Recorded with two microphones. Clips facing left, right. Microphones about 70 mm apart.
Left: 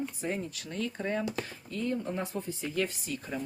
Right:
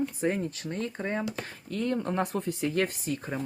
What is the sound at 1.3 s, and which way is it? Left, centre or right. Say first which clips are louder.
Speech: right 2 dB; right.